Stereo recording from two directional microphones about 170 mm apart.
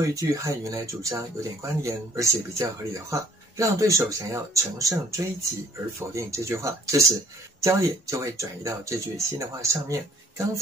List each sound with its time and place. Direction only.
0.1 s speech: 20° right (ahead or behind)